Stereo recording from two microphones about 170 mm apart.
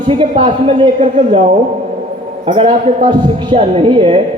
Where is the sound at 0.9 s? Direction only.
40° right (ahead or behind).